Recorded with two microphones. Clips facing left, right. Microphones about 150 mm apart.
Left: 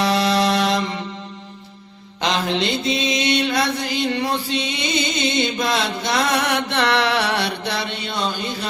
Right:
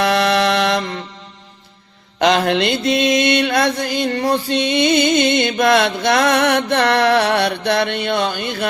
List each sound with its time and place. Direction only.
0.0 s music: 60° right (ahead or behind)
2.1 s mantra: 60° right (ahead or behind)